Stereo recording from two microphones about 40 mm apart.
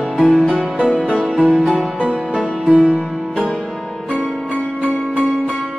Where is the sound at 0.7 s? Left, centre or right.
Right.